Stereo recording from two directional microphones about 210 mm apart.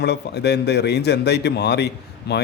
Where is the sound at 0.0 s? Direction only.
50° left (ahead or behind).